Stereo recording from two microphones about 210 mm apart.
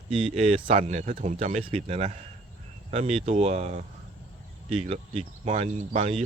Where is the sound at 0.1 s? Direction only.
25° right (ahead or behind).